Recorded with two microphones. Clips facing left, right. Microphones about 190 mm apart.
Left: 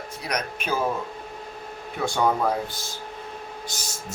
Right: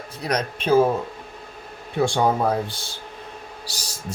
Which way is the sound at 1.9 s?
30° right (ahead or behind).